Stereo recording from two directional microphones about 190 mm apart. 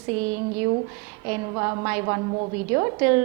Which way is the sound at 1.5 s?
20° right (ahead or behind).